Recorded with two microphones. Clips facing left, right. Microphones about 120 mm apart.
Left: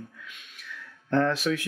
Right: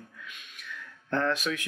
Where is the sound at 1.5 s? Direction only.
35° left (ahead or behind).